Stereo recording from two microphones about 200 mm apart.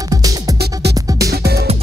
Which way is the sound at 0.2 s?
20° right (ahead or behind).